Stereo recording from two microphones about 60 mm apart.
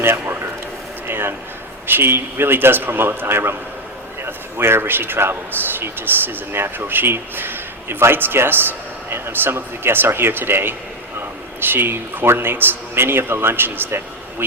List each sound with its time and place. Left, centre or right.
0.0 s a man's voice: right
1.0 s a sound: right
1.9 s a man's voice: right